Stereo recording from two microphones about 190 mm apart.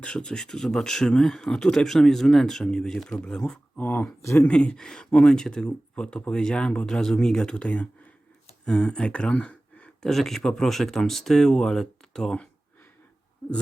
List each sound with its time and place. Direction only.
0.0 s speech: 5° left (ahead or behind)